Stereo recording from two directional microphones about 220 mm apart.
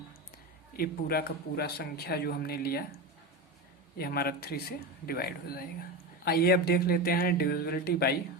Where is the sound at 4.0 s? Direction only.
45° left (ahead or behind).